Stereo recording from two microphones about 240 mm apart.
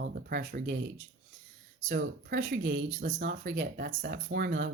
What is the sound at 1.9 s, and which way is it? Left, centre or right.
Speech, right.